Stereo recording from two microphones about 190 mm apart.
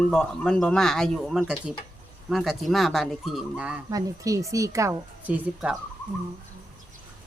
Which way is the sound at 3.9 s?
15° right (ahead or behind).